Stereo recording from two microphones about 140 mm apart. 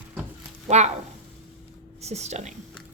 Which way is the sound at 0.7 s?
55° right (ahead or behind).